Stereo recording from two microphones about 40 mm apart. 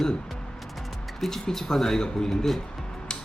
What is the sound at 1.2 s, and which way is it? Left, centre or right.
Speech, centre.